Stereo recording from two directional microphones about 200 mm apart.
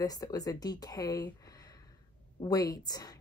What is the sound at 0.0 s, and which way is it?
A woman's voice, 20° left (ahead or behind).